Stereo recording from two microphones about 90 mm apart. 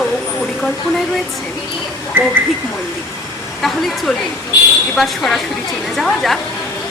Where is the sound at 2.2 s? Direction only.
25° right (ahead or behind).